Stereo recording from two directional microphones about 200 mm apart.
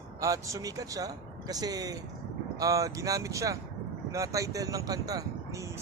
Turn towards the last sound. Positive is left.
turn(degrees=-15)  # may be behind; listen again after turning